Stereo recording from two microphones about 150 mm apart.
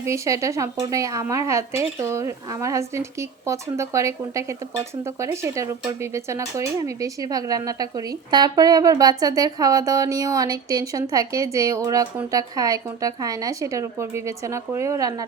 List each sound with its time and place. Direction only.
0.0 s speech: 20° right (ahead or behind)